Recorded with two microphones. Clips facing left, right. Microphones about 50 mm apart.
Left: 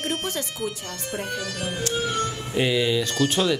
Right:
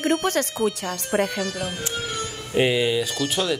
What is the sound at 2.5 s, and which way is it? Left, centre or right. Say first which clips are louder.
Speech: right 3 dB; right.